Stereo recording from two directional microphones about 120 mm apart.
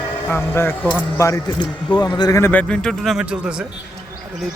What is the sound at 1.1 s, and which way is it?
Speech, 25° left (ahead or behind).